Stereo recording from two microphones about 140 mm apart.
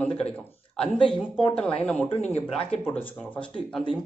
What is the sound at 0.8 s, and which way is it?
Speech, 5° left (ahead or behind).